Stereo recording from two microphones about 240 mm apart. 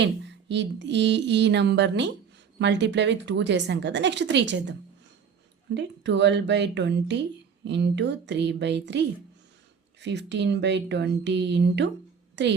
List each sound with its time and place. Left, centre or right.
0.0 s speech: right
5.7 s speech: right